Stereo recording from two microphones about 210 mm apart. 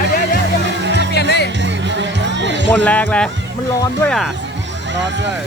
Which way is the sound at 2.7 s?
5° left (ahead or behind).